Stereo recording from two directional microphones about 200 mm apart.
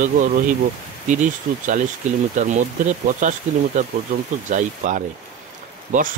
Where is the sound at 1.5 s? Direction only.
40° right (ahead or behind).